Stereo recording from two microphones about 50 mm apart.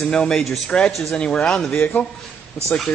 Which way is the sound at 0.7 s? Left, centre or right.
Centre.